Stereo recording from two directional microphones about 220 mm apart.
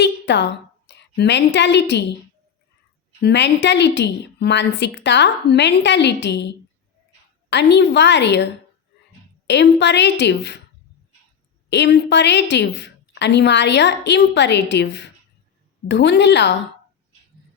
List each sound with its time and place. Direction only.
0.0 s a woman's voice: 50° left (ahead or behind)
3.2 s a woman's voice: 50° left (ahead or behind)
7.5 s a woman's voice: 50° left (ahead or behind)
9.5 s a woman's voice: 50° left (ahead or behind)
11.7 s a woman's voice: 50° left (ahead or behind)